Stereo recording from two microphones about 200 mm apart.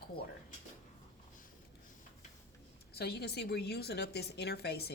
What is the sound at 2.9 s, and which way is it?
A woman's voice, 55° left (ahead or behind).